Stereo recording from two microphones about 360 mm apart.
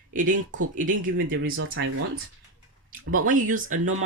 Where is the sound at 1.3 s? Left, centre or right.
Right.